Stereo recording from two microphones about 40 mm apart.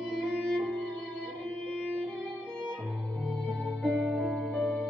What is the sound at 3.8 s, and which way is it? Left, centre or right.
Music, left.